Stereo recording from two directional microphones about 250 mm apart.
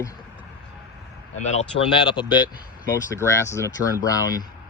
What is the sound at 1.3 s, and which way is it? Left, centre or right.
Speech, left.